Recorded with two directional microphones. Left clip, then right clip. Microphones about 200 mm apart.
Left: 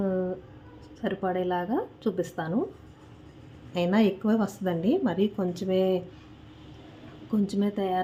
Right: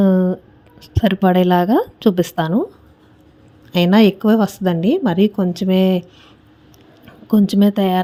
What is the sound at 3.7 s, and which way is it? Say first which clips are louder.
A woman's voice: right 11 dB; 45° right (ahead or behind).